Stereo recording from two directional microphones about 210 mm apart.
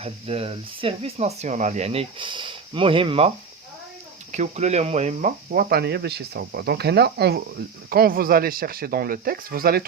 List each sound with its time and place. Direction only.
0.0 s speech: 30° right (ahead or behind); by 9.8 s 45° right (ahead or behind)